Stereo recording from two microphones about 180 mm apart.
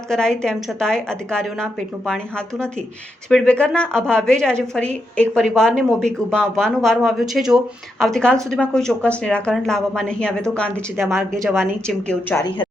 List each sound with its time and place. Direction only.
0.1 s speech: 5° left (ahead or behind)
3.2 s speech: 5° left (ahead or behind)
11.1 s a woman's voice: 15° right (ahead or behind)
11.9 s speech: 5° left (ahead or behind)
12.4 s speech: 25° left (ahead or behind)